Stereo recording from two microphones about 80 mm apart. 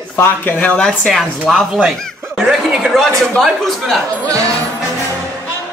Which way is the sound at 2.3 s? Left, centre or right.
Centre.